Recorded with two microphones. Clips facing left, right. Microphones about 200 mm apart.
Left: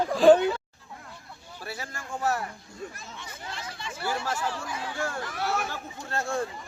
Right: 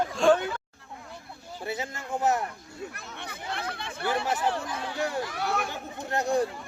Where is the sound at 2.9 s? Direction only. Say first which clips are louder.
Right 2 dB; 65° right (ahead or behind).